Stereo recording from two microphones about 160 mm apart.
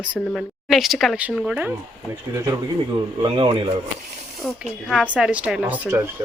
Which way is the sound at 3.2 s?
30° right (ahead or behind).